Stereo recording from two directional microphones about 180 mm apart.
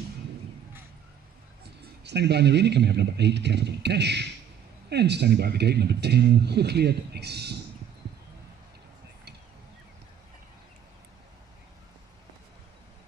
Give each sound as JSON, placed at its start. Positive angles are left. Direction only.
{"t": 2.0, "sound": "speech", "side_deg": -70}